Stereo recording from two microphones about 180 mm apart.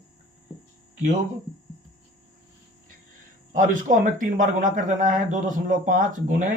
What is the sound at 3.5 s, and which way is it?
Speech, 45° right (ahead or behind).